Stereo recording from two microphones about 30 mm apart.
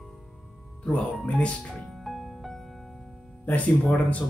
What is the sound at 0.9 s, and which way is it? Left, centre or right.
Speech, left.